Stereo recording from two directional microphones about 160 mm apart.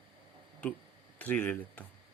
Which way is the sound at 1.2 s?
10° left (ahead or behind).